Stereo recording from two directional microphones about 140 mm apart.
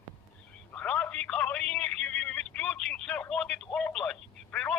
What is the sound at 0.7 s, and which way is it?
Telephone, 10° left (ahead or behind).